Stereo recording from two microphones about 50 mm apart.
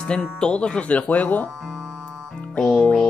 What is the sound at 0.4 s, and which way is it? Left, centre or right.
Speech, centre.